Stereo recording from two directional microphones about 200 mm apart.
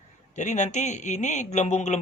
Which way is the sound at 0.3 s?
35° left (ahead or behind).